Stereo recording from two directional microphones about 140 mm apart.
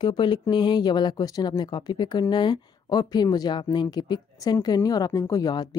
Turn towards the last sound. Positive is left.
turn(degrees=30)  # may be behind; listen again after turning